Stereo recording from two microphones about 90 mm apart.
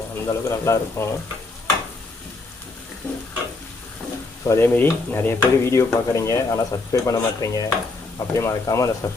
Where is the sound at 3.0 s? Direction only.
20° left (ahead or behind).